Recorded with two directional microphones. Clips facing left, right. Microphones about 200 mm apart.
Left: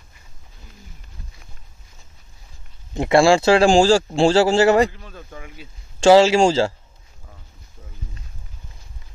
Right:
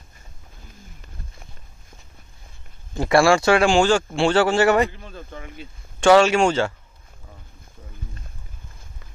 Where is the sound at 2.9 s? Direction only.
20° left (ahead or behind).